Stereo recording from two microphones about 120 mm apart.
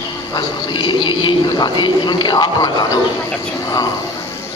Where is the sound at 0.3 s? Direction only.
40° left (ahead or behind).